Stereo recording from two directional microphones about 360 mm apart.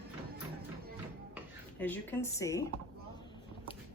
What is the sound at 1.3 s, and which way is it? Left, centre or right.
Speech, centre.